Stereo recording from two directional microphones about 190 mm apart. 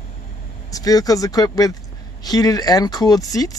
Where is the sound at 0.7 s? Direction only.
20° left (ahead or behind).